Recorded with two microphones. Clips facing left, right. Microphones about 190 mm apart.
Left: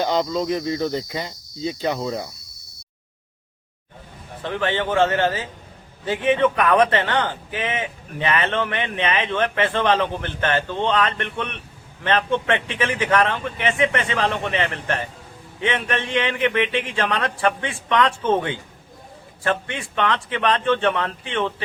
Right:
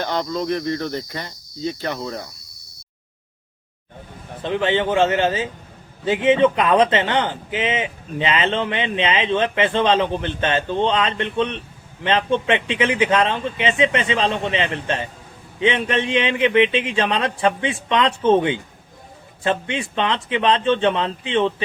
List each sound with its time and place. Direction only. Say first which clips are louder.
0.0 s cricket: left 2 dB; 15° left (ahead or behind)
4.4 s a man's voice: right 3 dB; 20° right (ahead or behind)